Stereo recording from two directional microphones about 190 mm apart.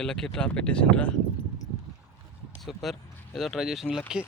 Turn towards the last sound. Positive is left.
turn(degrees=5)  # may be behind; listen again after turning